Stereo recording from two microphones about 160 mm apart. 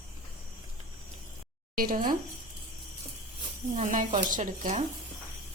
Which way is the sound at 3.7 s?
55° right (ahead or behind).